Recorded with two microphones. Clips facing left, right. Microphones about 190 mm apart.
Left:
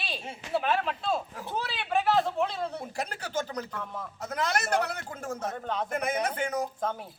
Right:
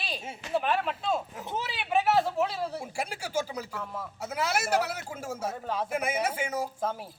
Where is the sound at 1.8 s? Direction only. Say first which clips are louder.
Right 1 dB; 10° right (ahead or behind).